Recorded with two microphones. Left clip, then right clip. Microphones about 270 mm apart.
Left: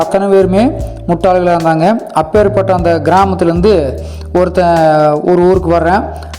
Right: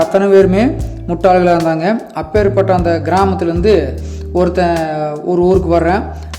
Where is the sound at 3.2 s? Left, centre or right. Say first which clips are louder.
Left 3 dB; centre.